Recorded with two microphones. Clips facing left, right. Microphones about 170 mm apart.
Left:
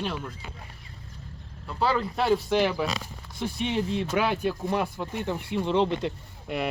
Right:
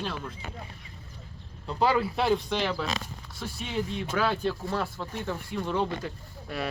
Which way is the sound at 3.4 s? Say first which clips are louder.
Left 5 dB; 25° left (ahead or behind).